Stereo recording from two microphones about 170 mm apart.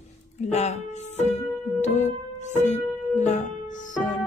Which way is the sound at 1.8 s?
45° left (ahead or behind).